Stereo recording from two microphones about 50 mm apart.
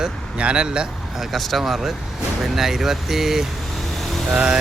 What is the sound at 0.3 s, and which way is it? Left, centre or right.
Speech, right.